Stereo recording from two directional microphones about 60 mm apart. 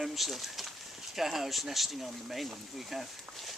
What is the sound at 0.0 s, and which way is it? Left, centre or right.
Speech, centre.